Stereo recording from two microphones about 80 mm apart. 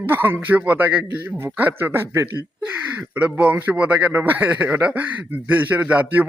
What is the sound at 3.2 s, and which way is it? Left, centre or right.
A man's voice, centre.